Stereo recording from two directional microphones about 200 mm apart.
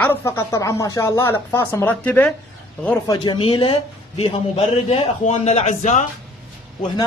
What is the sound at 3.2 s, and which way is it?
A man's voice, 25° left (ahead or behind).